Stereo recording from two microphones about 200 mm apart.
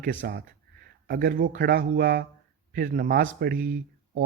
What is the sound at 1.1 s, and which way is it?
Speech, 50° right (ahead or behind).